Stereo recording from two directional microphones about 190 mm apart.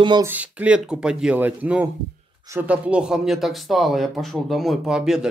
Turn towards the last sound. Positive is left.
turn(degrees=-5)  # may be behind; listen again after turning